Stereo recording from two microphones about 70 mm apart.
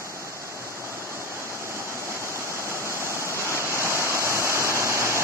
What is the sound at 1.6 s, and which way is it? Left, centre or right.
Waterfall, right.